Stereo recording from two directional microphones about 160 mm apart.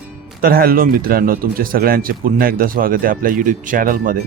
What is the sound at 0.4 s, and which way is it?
Speech, 65° right (ahead or behind).